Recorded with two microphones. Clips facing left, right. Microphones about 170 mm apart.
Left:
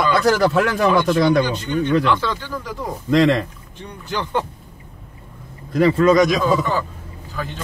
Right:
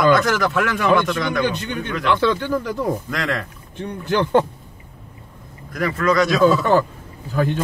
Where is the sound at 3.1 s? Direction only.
25° left (ahead or behind).